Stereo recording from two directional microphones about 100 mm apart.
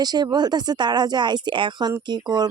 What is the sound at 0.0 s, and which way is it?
Speech, 45° right (ahead or behind).